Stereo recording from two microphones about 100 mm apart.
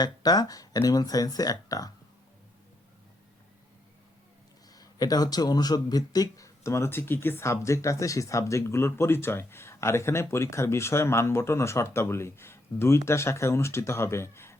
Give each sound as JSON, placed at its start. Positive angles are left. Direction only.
{"t": 0.0, "sound": "speech", "side_deg": 40}
{"t": 4.7, "sound": "speech", "side_deg": 40}